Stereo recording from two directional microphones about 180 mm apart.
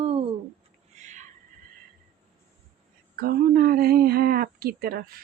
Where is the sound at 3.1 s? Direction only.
55° right (ahead or behind).